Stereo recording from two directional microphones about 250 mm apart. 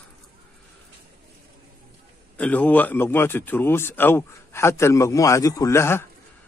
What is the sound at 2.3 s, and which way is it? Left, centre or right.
Speech, centre.